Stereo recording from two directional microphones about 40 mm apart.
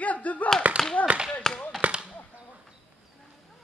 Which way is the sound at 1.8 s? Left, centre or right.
Right.